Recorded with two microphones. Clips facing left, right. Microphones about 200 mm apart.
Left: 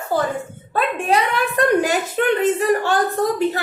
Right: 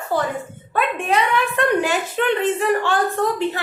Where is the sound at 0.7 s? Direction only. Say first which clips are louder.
Left 1 dB; 35° left (ahead or behind).